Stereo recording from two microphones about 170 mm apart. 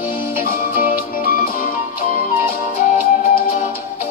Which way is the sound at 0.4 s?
55° left (ahead or behind).